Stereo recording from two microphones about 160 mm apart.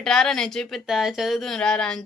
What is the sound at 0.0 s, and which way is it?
Speech, 5° left (ahead or behind).